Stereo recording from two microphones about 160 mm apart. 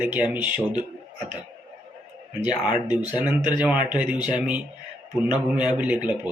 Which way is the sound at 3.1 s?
10° right (ahead or behind).